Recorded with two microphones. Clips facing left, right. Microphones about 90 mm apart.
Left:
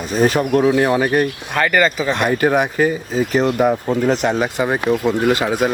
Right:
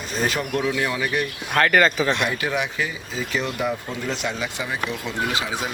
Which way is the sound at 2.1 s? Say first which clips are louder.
Left 8 dB; 45° left (ahead or behind).